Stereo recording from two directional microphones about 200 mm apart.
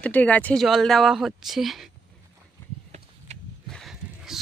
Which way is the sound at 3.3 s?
35° right (ahead or behind).